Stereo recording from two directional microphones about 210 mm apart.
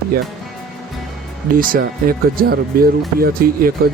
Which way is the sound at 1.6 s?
45° right (ahead or behind).